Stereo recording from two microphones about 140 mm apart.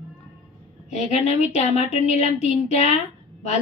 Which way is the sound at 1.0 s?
55° left (ahead or behind).